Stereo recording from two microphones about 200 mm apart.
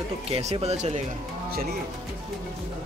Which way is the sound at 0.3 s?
30° right (ahead or behind).